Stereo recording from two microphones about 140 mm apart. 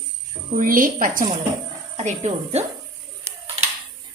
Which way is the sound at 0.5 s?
75° right (ahead or behind).